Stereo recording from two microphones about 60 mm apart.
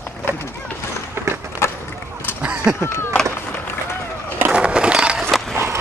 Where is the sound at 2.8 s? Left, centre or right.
Left.